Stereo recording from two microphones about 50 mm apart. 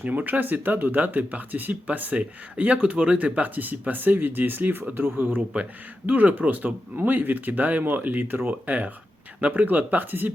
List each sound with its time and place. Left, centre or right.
0.0 s speech: right
6.1 s speech: right